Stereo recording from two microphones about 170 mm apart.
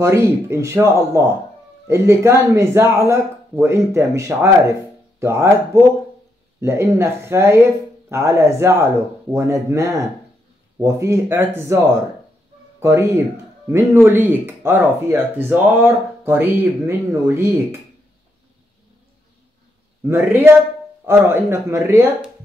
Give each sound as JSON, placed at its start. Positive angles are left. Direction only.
{"t": 0.0, "sound": "speech", "side_deg": -15}
{"t": 20.0, "sound": "speech", "side_deg": -15}